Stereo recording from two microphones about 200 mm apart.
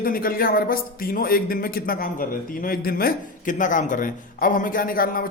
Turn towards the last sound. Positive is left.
turn(degrees=45)  # may be behind; listen again after turning